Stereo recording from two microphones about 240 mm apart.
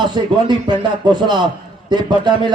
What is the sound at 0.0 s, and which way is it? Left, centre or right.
A man's voice, centre.